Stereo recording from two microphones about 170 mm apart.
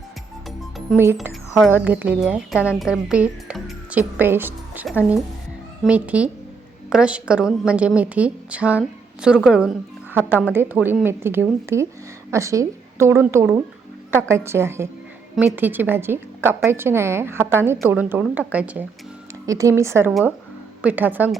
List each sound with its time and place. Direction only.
0.9 s speech: centre (ahead or behind)
1.3 s a sound: centre (ahead or behind)
1.7 s a woman's voice: 10° right (ahead or behind)
19.5 s a woman's voice: 20° right (ahead or behind)
20.1 s a woman's voice: 5° right (ahead or behind)